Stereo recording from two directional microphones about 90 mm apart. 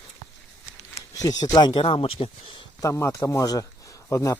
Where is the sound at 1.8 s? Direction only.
90° left.